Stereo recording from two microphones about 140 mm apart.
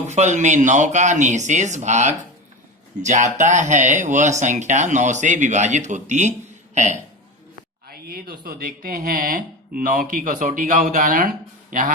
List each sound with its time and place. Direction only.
0.1 s speech: 55° right (ahead or behind)
7.9 s speech: 90° right